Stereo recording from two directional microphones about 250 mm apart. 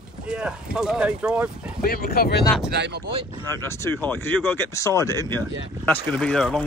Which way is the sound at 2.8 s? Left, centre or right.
Right.